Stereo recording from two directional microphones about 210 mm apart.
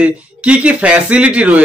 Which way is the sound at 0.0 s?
5° right (ahead or behind).